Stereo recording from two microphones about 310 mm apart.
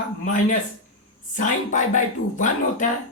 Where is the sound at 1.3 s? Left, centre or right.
Left.